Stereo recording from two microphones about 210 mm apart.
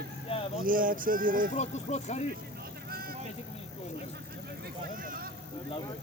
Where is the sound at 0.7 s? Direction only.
40° right (ahead or behind).